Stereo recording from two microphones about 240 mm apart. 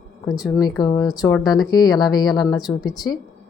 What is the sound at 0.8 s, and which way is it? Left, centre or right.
Speech, centre.